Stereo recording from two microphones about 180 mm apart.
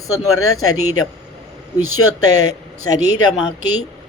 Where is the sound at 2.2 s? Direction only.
20° left (ahead or behind).